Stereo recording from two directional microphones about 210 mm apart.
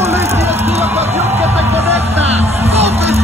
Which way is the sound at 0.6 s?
30° right (ahead or behind).